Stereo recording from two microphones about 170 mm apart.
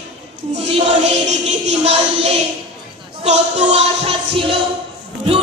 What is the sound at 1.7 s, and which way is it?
Music, 40° right (ahead or behind).